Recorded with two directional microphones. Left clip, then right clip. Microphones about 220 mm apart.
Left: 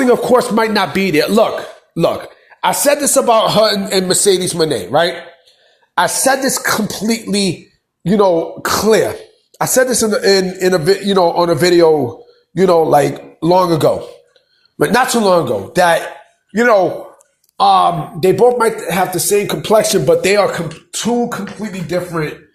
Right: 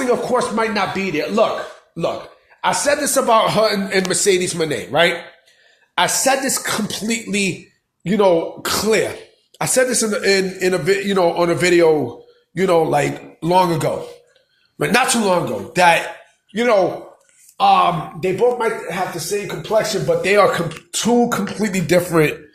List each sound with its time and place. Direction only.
0.0 s speech: 40° left (ahead or behind)
3.0 s a man's voice: 25° left (ahead or behind)
17.6 s speech: 30° left (ahead or behind)
18.9 s speech: 45° left (ahead or behind)
20.5 s speech: centre (ahead or behind)
21.4 s speech: 25° right (ahead or behind)